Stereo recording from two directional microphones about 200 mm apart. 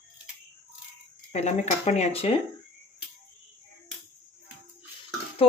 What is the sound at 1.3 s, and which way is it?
A woman's voice, 35° left (ahead or behind).